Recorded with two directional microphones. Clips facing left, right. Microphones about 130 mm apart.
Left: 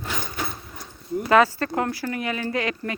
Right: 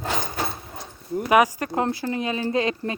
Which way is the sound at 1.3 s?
15° right (ahead or behind).